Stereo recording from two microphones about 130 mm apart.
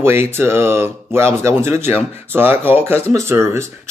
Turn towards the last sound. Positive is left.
turn(degrees=-20)  # may be behind; listen again after turning